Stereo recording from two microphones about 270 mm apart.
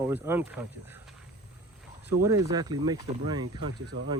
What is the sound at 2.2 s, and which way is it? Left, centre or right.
Speech, centre.